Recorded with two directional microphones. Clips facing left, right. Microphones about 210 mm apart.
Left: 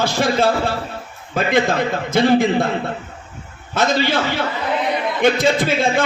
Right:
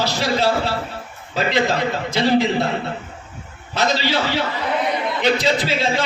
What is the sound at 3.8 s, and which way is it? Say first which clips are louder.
Speech: left 3 dB; 50° left (ahead or behind).